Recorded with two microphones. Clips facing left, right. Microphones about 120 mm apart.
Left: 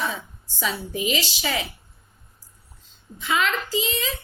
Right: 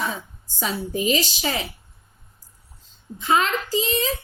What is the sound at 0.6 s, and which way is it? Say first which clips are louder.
A woman's voice: right 2 dB; 40° right (ahead or behind).